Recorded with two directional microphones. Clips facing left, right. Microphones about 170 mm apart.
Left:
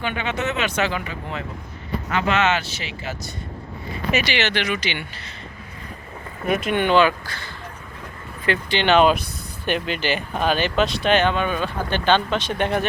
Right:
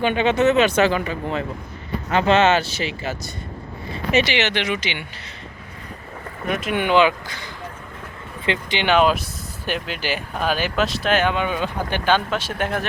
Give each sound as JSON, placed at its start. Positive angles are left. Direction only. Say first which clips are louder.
{"t": 0.0, "sound": "speech", "louder": "right 8 dB", "side_deg": -25}
{"t": 4.1, "sound": "speech", "louder": "right 3 dB", "side_deg": -25}
{"t": 6.5, "sound": "speech", "louder": "left 1 dB", "side_deg": -5}